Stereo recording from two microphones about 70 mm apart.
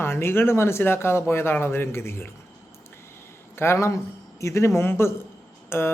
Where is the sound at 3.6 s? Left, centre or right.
Left.